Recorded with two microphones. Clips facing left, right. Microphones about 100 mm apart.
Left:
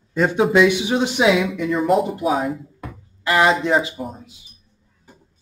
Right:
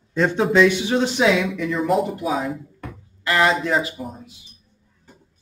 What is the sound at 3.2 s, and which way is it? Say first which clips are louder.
Speech: left 2 dB; 15° left (ahead or behind).